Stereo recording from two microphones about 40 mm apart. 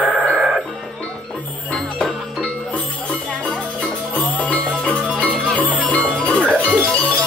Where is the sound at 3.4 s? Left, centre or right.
Left.